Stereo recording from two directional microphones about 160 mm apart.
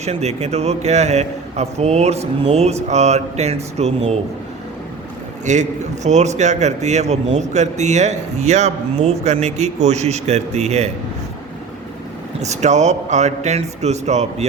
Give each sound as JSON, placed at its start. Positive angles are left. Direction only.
{"t": 0.0, "sound": "a man's voice", "side_deg": -40}
{"t": 5.5, "sound": "a man's voice", "side_deg": -50}
{"t": 12.4, "sound": "a man's voice", "side_deg": -45}